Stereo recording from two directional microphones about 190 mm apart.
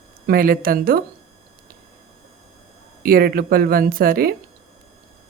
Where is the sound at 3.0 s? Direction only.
50° right (ahead or behind).